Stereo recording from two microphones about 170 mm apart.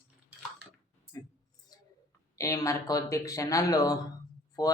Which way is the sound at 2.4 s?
20° left (ahead or behind).